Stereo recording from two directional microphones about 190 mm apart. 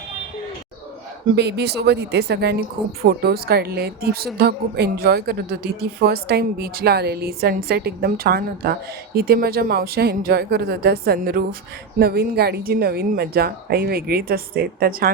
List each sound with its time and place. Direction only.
1.4 s a woman's voice: 60° right (ahead or behind)